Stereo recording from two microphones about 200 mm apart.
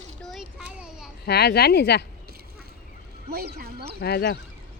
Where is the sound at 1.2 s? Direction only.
55° left (ahead or behind).